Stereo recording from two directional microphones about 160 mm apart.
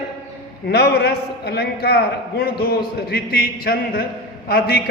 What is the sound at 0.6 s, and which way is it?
A man's voice, 90° left.